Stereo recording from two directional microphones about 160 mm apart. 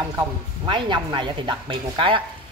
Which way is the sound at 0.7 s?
30° right (ahead or behind).